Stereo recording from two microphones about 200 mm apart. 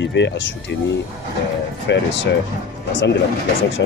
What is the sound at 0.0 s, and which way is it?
Speech, 60° left (ahead or behind).